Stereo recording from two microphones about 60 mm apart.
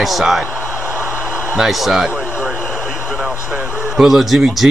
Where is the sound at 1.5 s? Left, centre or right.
Centre.